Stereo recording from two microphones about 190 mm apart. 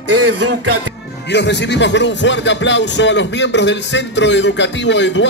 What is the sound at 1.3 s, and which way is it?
Speech, 65° left (ahead or behind).